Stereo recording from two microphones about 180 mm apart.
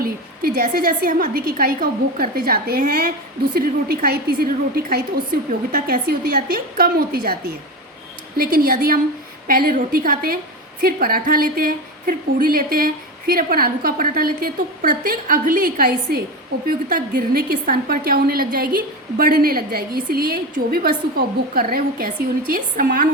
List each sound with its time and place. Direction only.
0.0 s a woman's voice: 55° right (ahead or behind)
8.4 s a woman's voice: 55° right (ahead or behind)